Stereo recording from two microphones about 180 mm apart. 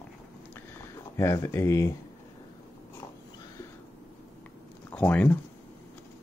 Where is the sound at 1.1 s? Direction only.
15° left (ahead or behind).